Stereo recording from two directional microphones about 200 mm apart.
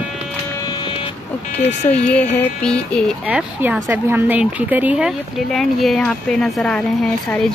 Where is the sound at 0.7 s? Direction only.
25° left (ahead or behind).